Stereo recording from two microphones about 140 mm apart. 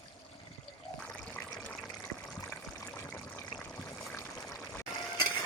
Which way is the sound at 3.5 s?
5° left (ahead or behind).